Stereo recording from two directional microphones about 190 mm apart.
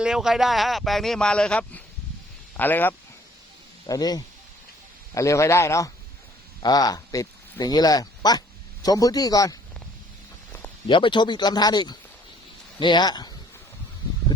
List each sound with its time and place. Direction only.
0.0 s speech: 5° right (ahead or behind); by 9.6 s 20° left (ahead or behind)
10.8 s speech: 25° left (ahead or behind)